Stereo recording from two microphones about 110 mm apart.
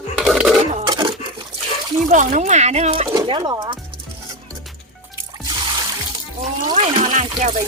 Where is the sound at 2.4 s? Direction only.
90° right.